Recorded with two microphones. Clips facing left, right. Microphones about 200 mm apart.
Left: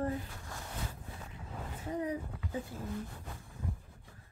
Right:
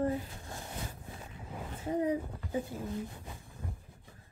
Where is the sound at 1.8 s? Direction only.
25° right (ahead or behind).